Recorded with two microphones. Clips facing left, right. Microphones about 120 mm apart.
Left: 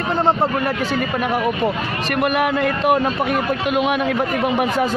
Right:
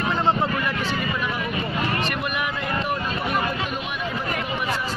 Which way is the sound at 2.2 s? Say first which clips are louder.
Left 9 dB; 60° left (ahead or behind).